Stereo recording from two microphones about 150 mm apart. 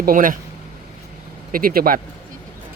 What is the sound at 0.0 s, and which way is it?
Speech, 65° right (ahead or behind).